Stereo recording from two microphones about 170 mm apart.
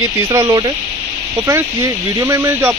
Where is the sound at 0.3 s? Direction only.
20° right (ahead or behind).